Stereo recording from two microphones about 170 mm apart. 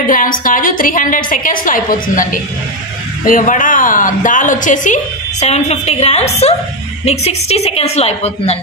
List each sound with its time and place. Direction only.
0.0 s a woman's voice: 55° left (ahead or behind); by 8.5 s 40° left (ahead or behind)